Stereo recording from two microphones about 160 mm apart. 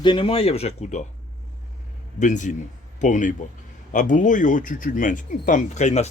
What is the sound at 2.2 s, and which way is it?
Speech, 50° left (ahead or behind).